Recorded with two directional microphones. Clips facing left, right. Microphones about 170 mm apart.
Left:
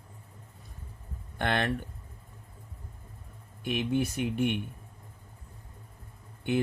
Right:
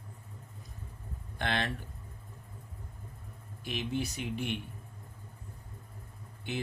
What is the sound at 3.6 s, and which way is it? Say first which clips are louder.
Speech: left 6 dB; 55° left (ahead or behind).